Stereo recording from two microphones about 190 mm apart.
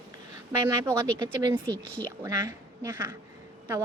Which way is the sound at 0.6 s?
15° right (ahead or behind).